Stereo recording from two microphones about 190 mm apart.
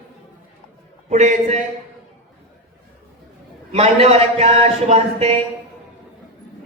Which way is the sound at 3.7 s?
35° right (ahead or behind).